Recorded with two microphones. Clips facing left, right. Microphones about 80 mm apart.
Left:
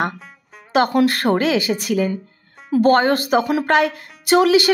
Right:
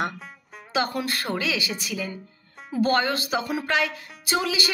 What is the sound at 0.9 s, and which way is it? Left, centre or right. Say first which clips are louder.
A woman's voice: left 12 dB; left.